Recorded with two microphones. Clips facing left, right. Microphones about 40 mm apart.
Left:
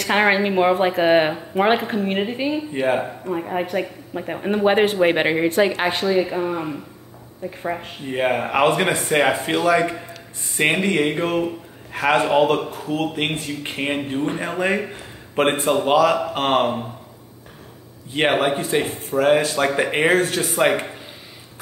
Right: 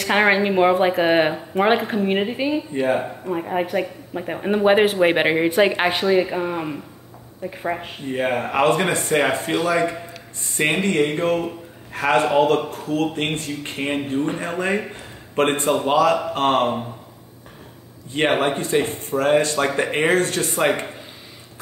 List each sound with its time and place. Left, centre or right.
0.0 s speech: centre
2.7 s a man's voice: centre
3.0 s speech: centre
5.7 s speech: right
6.2 s speech: centre
8.1 s a man's voice: centre
18.3 s a man's voice: centre